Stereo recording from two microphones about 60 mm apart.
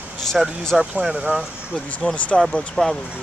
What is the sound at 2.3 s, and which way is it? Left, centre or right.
Speech, centre.